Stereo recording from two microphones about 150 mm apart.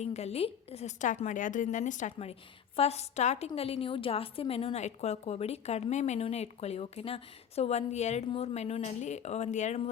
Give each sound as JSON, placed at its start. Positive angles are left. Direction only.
{"t": 0.0, "sound": "a woman's voice", "side_deg": 45}
{"t": 2.7, "sound": "a woman's voice", "side_deg": 45}